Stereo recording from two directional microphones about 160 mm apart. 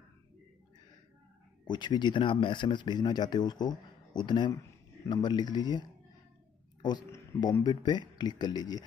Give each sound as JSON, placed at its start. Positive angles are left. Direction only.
{"t": 1.7, "sound": "speech", "side_deg": 30}